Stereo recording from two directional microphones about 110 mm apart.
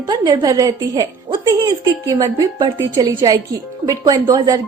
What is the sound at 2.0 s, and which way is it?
A woman's voice, 35° right (ahead or behind).